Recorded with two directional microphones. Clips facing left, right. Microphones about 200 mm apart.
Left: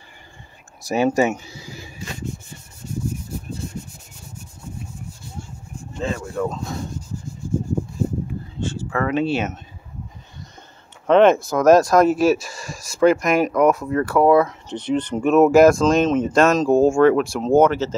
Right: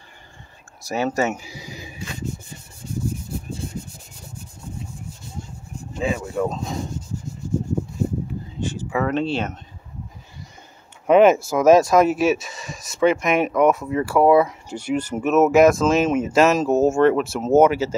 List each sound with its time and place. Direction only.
0.8 s speech: 15° left (ahead or behind)
1.3 s speech: 10° right (ahead or behind)
5.9 s speech: 10° right (ahead or behind)
8.5 s a sound: 15° right (ahead or behind)
9.0 s speech: 5° left (ahead or behind)
11.1 s speech: 5° right (ahead or behind)